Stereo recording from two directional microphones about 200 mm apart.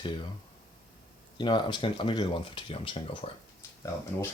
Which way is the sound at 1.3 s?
25° left (ahead or behind).